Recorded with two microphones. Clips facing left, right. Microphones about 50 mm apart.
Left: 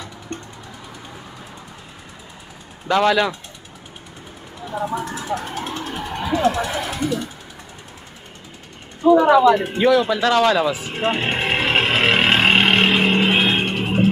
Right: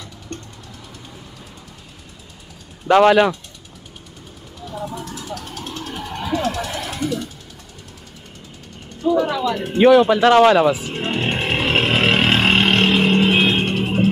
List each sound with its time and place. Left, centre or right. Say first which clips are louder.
2.9 s speech: right 5 dB; right
4.6 s vehicle: left 5 dB; left
9.0 s speech: left 7 dB; left
9.8 s speech: right 5 dB; right
10.9 s vehicle: left 1 dB; centre